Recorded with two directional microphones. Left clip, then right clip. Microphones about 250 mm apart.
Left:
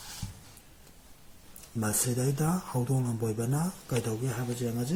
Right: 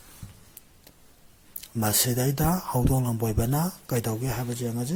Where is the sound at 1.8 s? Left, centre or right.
Right.